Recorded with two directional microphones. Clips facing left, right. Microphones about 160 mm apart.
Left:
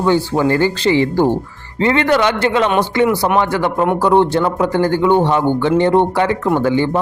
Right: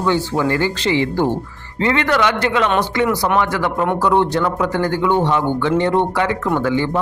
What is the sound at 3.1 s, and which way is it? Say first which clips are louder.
Speech: left 2 dB; 10° left (ahead or behind).